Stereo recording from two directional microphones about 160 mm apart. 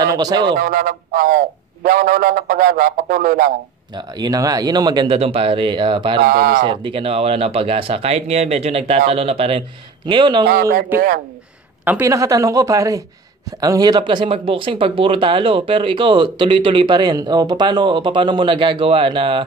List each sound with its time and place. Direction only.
0.0 s a man's voice: 25° right (ahead or behind)
0.6 s a man's voice: 65° right (ahead or behind)
3.9 s speech: 25° right (ahead or behind)
6.2 s a man's voice: 60° right (ahead or behind)
6.6 s speech: 30° right (ahead or behind)
10.5 s a man's voice: 65° right (ahead or behind)
11.8 s speech: 15° right (ahead or behind); by 19.4 s 35° right (ahead or behind)